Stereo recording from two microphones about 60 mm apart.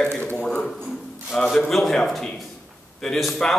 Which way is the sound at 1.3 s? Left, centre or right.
Centre.